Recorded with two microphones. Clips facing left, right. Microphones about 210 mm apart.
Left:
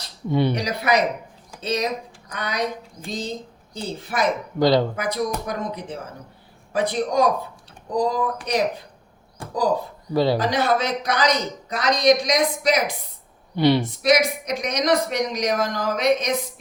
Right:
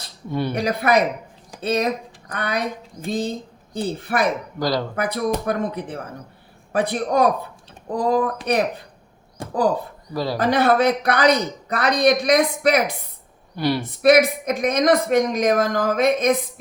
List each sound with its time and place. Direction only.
0.3 s speech: 20° left (ahead or behind)
0.5 s a woman's voice: 55° right (ahead or behind)
10.3 s speech: 55° right (ahead or behind)
13.6 s speech: 20° left (ahead or behind)
14.0 s a woman's voice: 55° right (ahead or behind)